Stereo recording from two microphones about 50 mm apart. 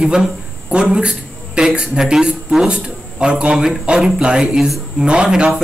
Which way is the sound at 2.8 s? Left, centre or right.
Right.